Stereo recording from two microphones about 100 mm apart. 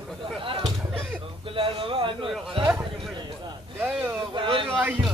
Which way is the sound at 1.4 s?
65° right (ahead or behind).